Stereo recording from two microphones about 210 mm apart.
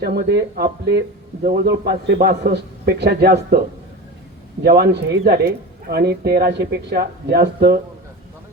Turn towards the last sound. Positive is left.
turn(degrees=-50)  # may be behind; listen again after turning